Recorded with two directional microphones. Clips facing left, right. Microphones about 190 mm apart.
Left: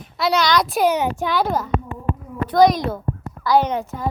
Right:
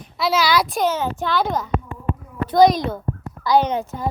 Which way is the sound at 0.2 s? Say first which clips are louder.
Left 1 dB; centre (ahead or behind).